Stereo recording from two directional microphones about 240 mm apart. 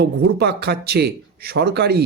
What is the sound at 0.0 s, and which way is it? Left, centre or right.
A man's voice, right.